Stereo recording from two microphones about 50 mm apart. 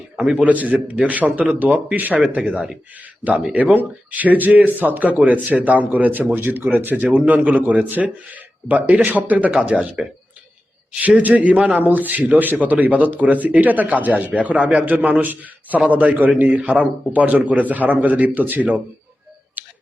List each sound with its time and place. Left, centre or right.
0.2 s a man's voice: centre
0.4 s a man's voice: right
10.0 s a man's voice: centre
11.2 s a man's voice: right
19.6 s finger snapping: right